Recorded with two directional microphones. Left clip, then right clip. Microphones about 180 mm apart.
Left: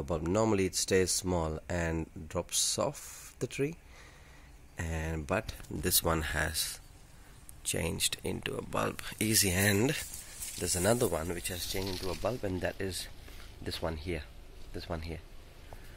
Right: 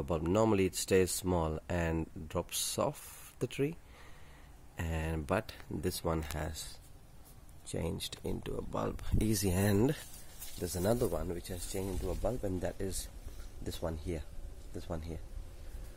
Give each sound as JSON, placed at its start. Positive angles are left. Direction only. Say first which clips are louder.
{"t": 0.0, "sound": "speech", "louder": "even", "side_deg": -5}
{"t": 4.7, "sound": "speech", "louder": "left 1 dB", "side_deg": -5}
{"t": 7.6, "sound": "speech", "louder": "left 6 dB", "side_deg": -10}
{"t": 10.6, "sound": "speech", "louder": "left 3 dB", "side_deg": -5}
{"t": 11.4, "sound": "speech", "louder": "left 4 dB", "side_deg": -15}